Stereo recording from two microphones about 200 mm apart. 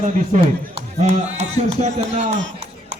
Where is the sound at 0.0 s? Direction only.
35° right (ahead or behind).